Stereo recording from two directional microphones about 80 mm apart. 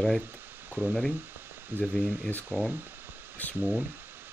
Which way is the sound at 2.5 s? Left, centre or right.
Right.